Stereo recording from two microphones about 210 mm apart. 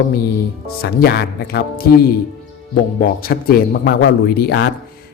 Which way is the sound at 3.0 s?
45° left (ahead or behind).